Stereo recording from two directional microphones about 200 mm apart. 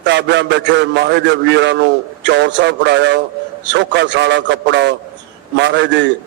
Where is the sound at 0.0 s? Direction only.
60° right (ahead or behind).